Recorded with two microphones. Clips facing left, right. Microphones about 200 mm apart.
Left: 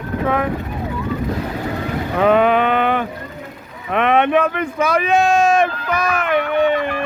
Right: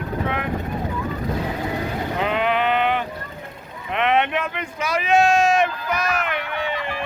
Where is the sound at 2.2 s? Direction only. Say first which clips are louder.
Left 8 dB; 50° left (ahead or behind).